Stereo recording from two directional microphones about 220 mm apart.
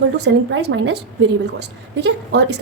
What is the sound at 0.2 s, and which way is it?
A woman's voice, 55° right (ahead or behind).